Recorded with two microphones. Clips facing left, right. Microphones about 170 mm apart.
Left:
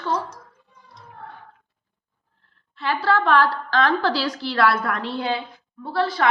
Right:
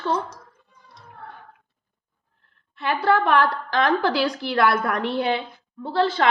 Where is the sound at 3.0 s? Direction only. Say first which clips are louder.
Even; 15° right (ahead or behind).